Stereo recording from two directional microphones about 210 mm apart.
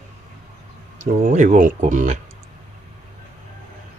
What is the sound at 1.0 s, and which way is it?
Speech, 35° right (ahead or behind).